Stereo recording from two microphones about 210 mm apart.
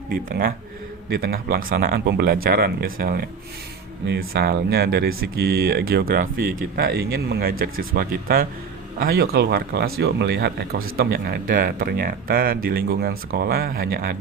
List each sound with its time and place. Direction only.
0.1 s speech: 45° right (ahead or behind)